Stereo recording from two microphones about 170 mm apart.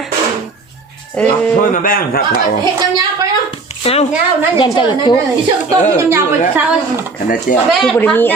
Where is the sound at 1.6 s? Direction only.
55° left (ahead or behind).